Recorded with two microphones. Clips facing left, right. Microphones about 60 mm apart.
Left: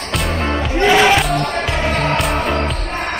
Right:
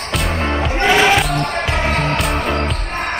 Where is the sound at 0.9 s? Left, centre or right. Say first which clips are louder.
Left 1 dB; centre.